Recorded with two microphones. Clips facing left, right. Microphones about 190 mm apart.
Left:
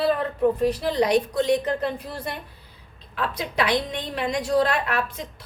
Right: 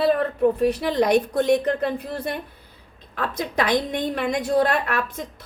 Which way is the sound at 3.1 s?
50° right (ahead or behind).